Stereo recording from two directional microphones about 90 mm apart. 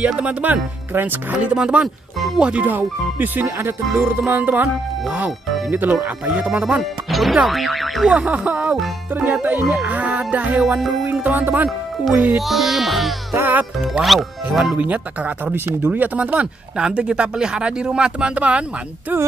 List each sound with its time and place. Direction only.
0.0 s speech: 15° right (ahead or behind)
2.1 s speech: centre (ahead or behind)
2.4 s speech: 15° right (ahead or behind)
5.7 s speech: 20° right (ahead or behind)
6.8 s speech: centre (ahead or behind)
8.1 s speech: 15° right (ahead or behind)
10.6 s speech: 5° right (ahead or behind)
11.1 s speech: 20° right (ahead or behind)
12.4 s speech: centre (ahead or behind)
14.8 s speech: 15° right (ahead or behind)